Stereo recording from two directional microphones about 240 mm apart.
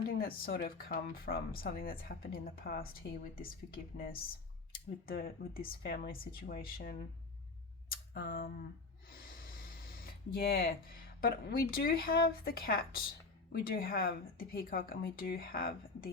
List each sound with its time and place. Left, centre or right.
0.2 s speech: left
7.9 s a sound: left
9.0 s snort: left
10.3 s speech: left